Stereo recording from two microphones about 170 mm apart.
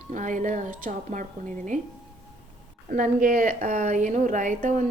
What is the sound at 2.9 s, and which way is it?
A woman's voice, 55° right (ahead or behind).